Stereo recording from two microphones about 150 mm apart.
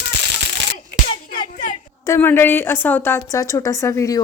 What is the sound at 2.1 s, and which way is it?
A woman's voice, 15° left (ahead or behind).